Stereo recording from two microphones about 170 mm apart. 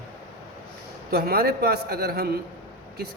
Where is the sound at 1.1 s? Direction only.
65° right (ahead or behind).